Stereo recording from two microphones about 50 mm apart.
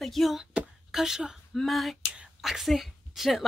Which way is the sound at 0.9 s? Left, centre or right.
Centre.